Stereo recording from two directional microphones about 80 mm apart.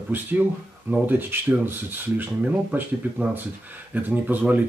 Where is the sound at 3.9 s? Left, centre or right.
Right.